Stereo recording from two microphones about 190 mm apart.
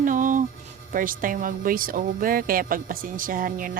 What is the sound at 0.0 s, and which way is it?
Music, 45° right (ahead or behind).